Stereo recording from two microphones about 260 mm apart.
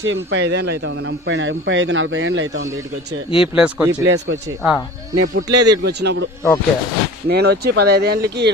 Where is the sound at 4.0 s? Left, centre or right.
Right.